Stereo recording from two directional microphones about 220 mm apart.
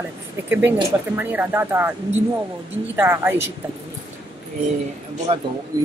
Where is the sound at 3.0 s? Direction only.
10° right (ahead or behind).